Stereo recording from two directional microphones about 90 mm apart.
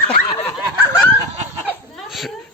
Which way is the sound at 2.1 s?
Centre (ahead or behind).